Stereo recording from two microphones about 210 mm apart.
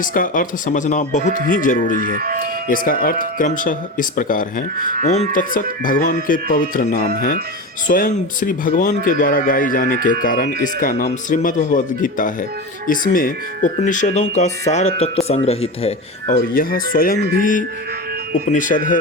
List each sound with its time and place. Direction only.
0.0 s speech: 40° left (ahead or behind)
2.1 s speech: 45° right (ahead or behind)
2.6 s speech: 40° left (ahead or behind)
4.8 s speech: 45° right (ahead or behind)
5.0 s speech: 35° left (ahead or behind)
16.6 s speech: 45° left (ahead or behind)
18.3 s speech: 40° left (ahead or behind)